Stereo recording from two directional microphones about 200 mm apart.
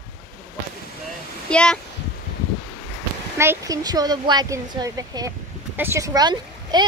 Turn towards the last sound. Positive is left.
turn(degrees=-20)  # may be behind; listen again after turning